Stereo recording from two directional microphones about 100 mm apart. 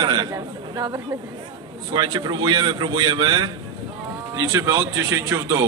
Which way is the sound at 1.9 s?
45° right (ahead or behind).